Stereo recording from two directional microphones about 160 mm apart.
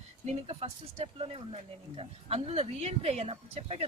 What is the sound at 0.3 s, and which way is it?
Speech, 40° right (ahead or behind).